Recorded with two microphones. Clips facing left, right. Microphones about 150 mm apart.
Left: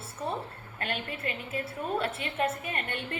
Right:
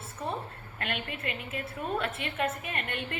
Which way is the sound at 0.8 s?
35° left (ahead or behind).